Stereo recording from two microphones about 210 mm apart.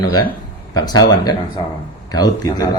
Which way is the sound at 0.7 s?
20° left (ahead or behind).